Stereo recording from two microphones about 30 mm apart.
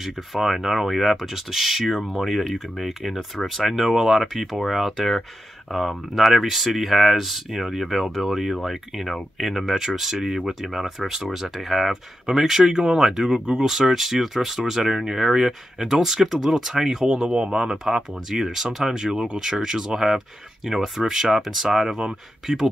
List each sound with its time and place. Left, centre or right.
0.0 s speech: centre
4.9 s speech: centre
9.8 s speech: centre
13.5 s speech: right
13.7 s speech: centre
17.0 s speech: right